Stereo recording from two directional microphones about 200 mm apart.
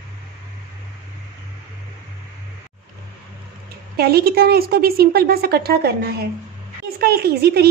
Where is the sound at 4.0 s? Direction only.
50° right (ahead or behind).